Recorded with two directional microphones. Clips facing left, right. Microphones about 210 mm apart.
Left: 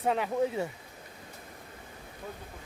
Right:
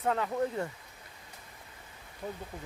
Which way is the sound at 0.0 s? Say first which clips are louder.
Left 2 dB; 15° left (ahead or behind).